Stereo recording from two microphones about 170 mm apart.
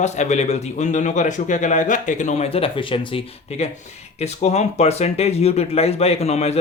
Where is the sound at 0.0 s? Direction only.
45° left (ahead or behind).